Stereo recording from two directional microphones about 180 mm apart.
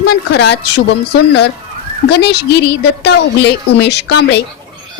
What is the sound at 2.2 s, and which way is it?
A woman's voice, 70° left (ahead or behind).